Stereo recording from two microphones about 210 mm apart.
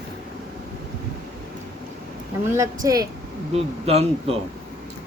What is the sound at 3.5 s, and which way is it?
Speech, 30° right (ahead or behind).